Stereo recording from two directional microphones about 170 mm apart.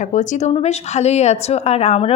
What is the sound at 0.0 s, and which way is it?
A woman's voice, 45° left (ahead or behind).